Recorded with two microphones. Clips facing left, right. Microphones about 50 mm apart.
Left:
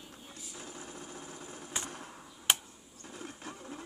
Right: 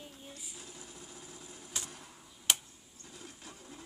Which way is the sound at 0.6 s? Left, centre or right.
Left.